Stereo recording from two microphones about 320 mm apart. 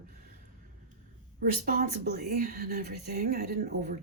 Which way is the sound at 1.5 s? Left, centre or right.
Right.